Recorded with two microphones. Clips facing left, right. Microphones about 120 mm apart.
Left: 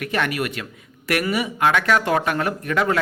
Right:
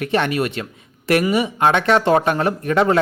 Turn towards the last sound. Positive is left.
turn(degrees=-30)  # may be behind; listen again after turning